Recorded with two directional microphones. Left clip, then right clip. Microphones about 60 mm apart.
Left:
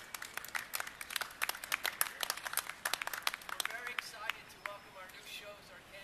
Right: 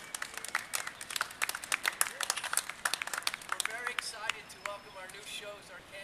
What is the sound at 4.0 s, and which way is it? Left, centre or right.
Run, centre.